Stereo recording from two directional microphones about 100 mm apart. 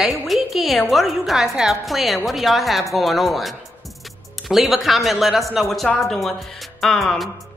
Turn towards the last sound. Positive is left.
turn(degrees=5)  # may be behind; listen again after turning